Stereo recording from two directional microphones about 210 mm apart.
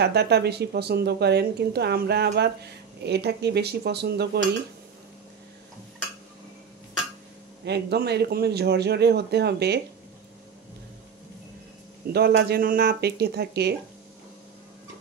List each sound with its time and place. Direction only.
0.0 s speech: 50° right (ahead or behind)
7.6 s speech: 50° right (ahead or behind)
12.1 s speech: 50° right (ahead or behind)